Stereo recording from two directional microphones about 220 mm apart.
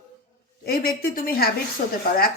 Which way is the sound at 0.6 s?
45° left (ahead or behind).